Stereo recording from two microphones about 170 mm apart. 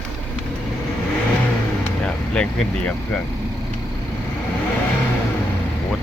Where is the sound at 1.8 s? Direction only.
5° left (ahead or behind).